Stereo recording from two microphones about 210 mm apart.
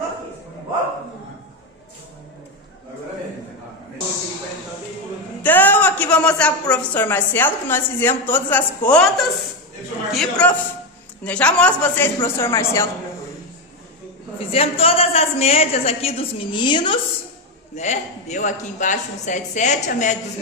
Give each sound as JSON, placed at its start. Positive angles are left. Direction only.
{"t": 5.4, "sound": "a woman's voice", "side_deg": 10}
{"t": 14.3, "sound": "a woman's voice", "side_deg": 25}
{"t": 17.7, "sound": "speech", "side_deg": 35}